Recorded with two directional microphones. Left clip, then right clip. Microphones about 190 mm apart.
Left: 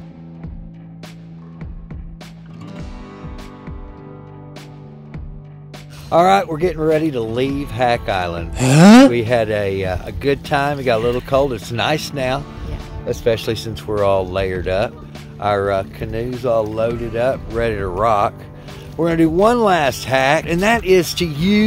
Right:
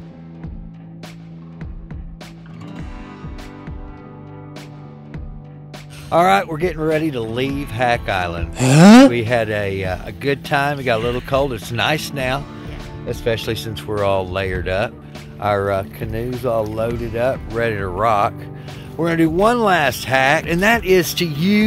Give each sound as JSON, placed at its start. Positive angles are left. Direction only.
{"t": 6.0, "sound": "speech", "side_deg": -5}
{"t": 15.4, "sound": "speech", "side_deg": -30}
{"t": 17.5, "sound": "speech", "side_deg": -5}